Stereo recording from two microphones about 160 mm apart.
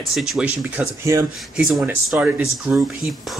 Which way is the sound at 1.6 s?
Centre (ahead or behind).